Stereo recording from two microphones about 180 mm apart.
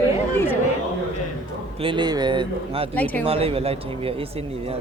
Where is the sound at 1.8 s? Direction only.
25° right (ahead or behind).